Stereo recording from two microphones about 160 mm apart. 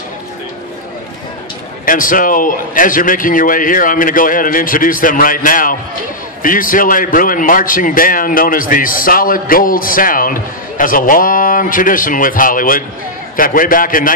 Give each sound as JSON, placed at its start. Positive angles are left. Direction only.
{"t": 1.9, "sound": "a man's voice", "side_deg": 60}